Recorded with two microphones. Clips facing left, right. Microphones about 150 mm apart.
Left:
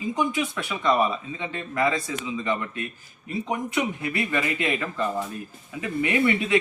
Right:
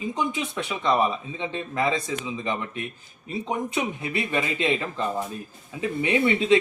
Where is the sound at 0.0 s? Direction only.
25° right (ahead or behind).